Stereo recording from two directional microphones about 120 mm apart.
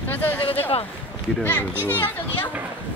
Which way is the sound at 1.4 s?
15° left (ahead or behind).